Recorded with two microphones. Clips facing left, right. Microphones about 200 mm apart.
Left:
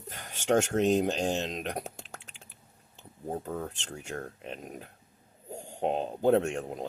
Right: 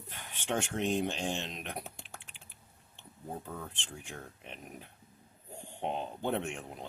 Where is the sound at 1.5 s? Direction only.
40° left (ahead or behind).